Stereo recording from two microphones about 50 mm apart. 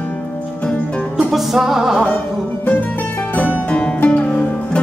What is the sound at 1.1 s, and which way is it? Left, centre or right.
Music, centre.